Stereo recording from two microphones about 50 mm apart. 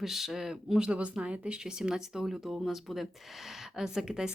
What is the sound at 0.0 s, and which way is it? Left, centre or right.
Speech, centre.